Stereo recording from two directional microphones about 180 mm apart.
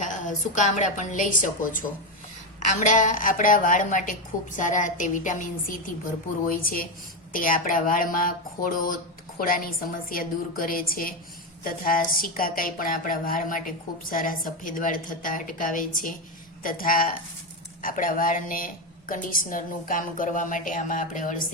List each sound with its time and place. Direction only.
0.0 s a woman's voice: 45° left (ahead or behind)